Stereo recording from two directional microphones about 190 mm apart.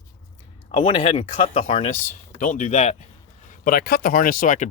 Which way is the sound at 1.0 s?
40° left (ahead or behind).